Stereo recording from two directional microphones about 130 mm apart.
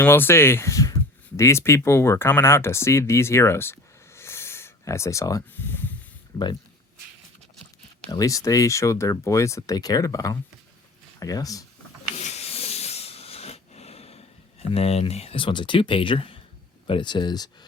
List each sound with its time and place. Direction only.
0.0 s speech: 15° left (ahead or behind)
8.1 s speech: 25° left (ahead or behind)
12.1 s hiss: 55° left (ahead or behind)
14.7 s speech: 50° left (ahead or behind); by 17.7 s 30° left (ahead or behind)